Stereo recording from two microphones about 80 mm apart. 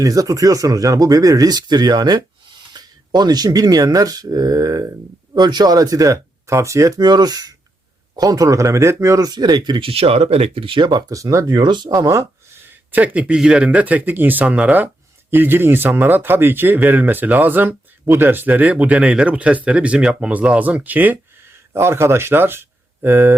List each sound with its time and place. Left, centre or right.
0.0 s speech: right
7.0 s speech: right
11.1 s speech: right
11.4 s speech: right
11.9 s speech: right
12.9 s speech: centre
21.7 s speech: right